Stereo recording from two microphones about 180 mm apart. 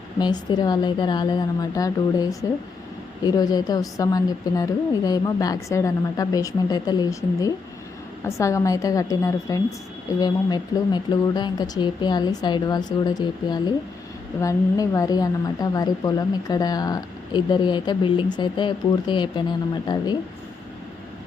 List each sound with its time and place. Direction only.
0.2 s a woman's voice: 25° left (ahead or behind)